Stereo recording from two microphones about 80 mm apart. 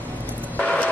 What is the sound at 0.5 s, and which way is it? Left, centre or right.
Vehicle, centre.